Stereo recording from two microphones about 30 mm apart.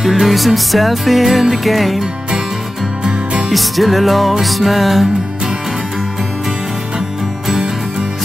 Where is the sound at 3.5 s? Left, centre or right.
Centre.